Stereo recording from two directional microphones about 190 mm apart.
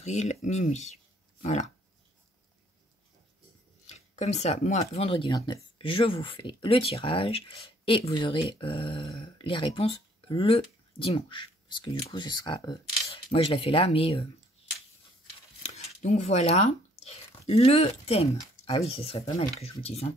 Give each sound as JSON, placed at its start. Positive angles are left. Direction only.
{"t": 0.0, "sound": "speech", "side_deg": 35}
{"t": 1.4, "sound": "a sound", "side_deg": 35}
{"t": 3.8, "sound": "speech", "side_deg": 35}
{"t": 15.6, "sound": "speech", "side_deg": 35}